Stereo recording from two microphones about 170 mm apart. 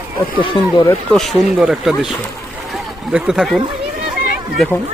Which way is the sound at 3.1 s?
5° right (ahead or behind).